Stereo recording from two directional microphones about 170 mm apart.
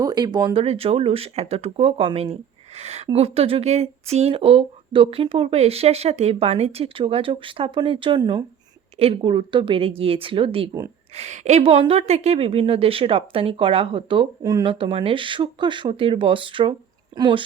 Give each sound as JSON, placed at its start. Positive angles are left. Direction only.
{"t": 0.0, "sound": "speech", "side_deg": -25}
{"t": 0.6, "sound": "speech", "side_deg": -35}